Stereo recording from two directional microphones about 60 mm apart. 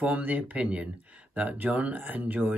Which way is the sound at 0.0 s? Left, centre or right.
Right.